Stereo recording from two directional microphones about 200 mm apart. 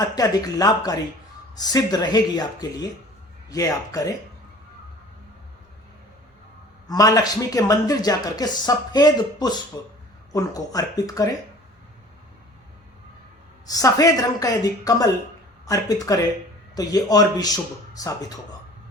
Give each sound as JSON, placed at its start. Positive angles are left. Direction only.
{"t": 0.0, "sound": "a man's voice", "side_deg": 15}
{"t": 6.8, "sound": "a man's voice", "side_deg": 15}
{"t": 13.7, "sound": "a woman's voice", "side_deg": 20}